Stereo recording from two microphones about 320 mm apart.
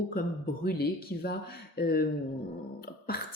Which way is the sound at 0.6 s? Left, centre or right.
Left.